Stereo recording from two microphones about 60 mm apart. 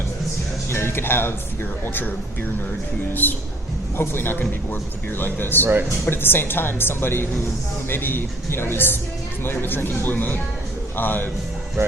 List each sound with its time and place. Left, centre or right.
0.7 s speech: left
3.2 s a man's voice: left